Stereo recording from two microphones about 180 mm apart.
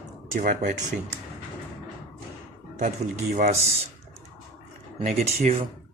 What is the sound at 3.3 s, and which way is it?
Speech, 40° right (ahead or behind).